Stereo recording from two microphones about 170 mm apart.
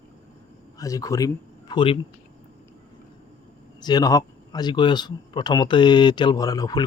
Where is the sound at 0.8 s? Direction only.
20° left (ahead or behind).